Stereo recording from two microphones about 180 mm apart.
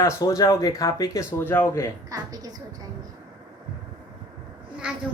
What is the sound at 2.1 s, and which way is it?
Speech, 20° right (ahead or behind).